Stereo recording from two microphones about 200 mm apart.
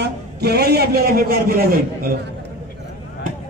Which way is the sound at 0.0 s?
55° right (ahead or behind).